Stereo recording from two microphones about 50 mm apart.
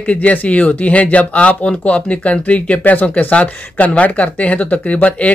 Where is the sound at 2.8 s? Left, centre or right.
Left.